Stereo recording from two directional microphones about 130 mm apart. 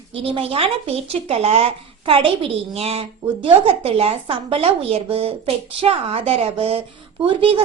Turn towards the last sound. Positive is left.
turn(degrees=-45)  # may be behind; listen again after turning